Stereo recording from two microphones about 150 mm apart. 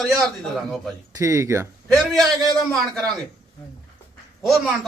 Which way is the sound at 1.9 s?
Centre (ahead or behind).